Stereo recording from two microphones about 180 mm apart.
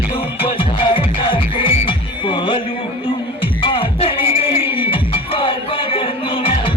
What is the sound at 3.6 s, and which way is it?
Music, 30° left (ahead or behind).